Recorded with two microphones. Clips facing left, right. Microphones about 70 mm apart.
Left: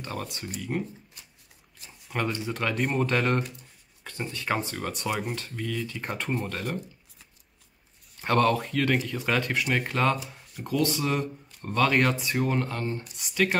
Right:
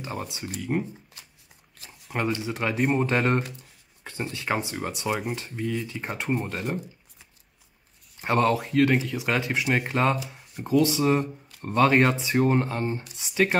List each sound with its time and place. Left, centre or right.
0.0 s speech: centre
0.3 s speech: centre
2.1 s speech: centre
3.0 s speech: right
8.2 s speech: centre
10.1 s a sound: centre
10.6 s speech: centre
12.1 s speech: centre
12.4 s speech: right